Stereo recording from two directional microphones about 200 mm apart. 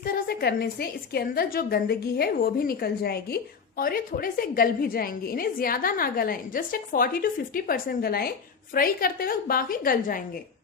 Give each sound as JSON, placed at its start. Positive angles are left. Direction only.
{"t": 0.0, "sound": "a woman's voice", "side_deg": 50}